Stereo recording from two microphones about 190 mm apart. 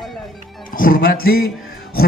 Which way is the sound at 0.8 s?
50° left (ahead or behind).